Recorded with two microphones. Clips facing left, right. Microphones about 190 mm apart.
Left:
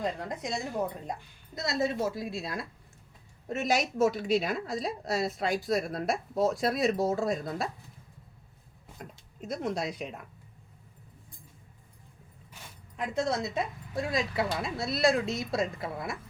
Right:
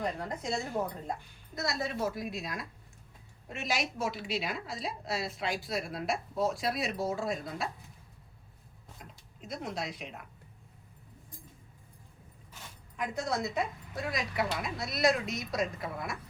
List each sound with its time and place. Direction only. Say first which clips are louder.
0.0 s a woman's voice: left 2 dB; 20° left (ahead or behind)
3.5 s a woman's voice: left 6 dB; 40° left (ahead or behind)
9.5 s a woman's voice: left 5 dB; 40° left (ahead or behind)
13.0 s a woman's voice: left 3 dB; 25° left (ahead or behind)